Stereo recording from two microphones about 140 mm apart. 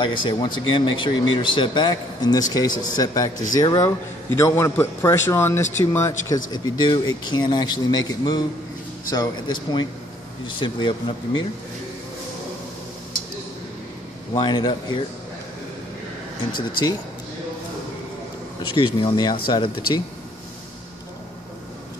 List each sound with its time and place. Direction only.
0.0 s a man's voice: 35° left (ahead or behind)
14.3 s speech: 30° left (ahead or behind)
18.7 s speech: 35° left (ahead or behind)